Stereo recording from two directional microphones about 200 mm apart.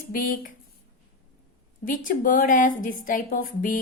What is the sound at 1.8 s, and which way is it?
A woman's voice, 40° left (ahead or behind).